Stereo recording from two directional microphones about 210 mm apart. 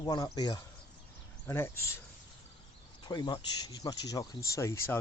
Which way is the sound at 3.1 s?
20° left (ahead or behind).